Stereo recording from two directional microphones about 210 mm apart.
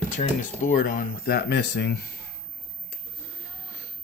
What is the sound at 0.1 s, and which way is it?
Speech, 35° left (ahead or behind).